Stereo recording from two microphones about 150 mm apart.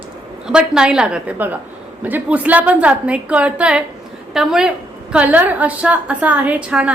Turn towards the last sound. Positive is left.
turn(degrees=-10)  # may be behind; listen again after turning